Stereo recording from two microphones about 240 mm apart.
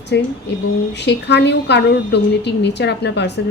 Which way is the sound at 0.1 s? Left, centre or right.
Left.